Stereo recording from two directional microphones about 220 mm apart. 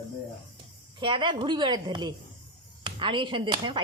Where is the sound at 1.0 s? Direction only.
20° right (ahead or behind).